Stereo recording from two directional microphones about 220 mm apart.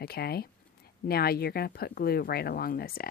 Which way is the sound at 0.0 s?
45° left (ahead or behind).